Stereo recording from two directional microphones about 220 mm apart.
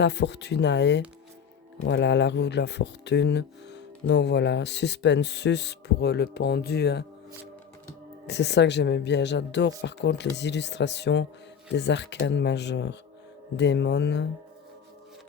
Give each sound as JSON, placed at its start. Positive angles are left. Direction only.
{"t": 0.0, "sound": "speech", "side_deg": 50}
{"t": 8.3, "sound": "speech", "side_deg": 50}